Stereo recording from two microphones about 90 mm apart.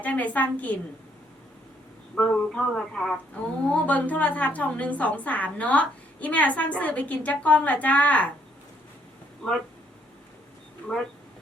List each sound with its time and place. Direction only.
0.0 s a woman's voice: 15° left (ahead or behind)
2.1 s a woman's voice: 10° left (ahead or behind)
3.6 s a woman's voice: 15° left (ahead or behind)